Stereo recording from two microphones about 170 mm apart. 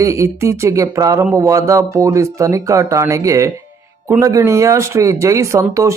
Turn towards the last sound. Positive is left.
turn(degrees=-15)  # may be behind; listen again after turning